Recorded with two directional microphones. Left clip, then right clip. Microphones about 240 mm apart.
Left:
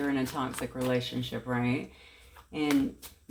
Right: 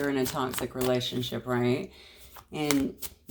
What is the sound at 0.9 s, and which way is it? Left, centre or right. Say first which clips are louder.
Speech: right 2 dB; right.